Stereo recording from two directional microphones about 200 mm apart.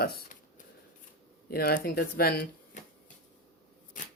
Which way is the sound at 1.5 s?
50° left (ahead or behind).